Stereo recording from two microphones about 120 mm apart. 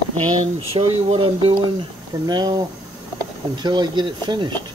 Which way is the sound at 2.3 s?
35° right (ahead or behind).